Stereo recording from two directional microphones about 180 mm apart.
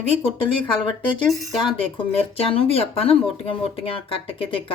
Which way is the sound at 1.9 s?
30° left (ahead or behind).